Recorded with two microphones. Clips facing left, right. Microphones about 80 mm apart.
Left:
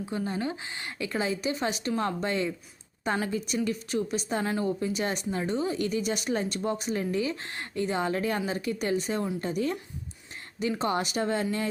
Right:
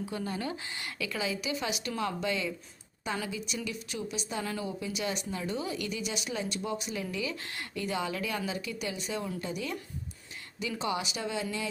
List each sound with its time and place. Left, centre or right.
0.0 s a woman's voice: left